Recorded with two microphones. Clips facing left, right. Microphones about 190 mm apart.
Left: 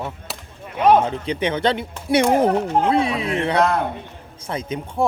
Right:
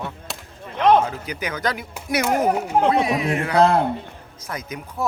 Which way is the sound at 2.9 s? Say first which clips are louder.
Even; 30° left (ahead or behind).